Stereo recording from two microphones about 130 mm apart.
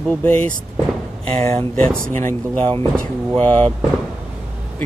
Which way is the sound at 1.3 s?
55° right (ahead or behind).